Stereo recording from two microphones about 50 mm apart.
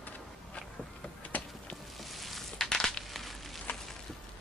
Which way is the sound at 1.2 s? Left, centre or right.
Left.